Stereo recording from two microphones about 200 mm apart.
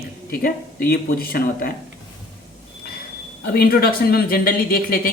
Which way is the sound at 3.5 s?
50° left (ahead or behind).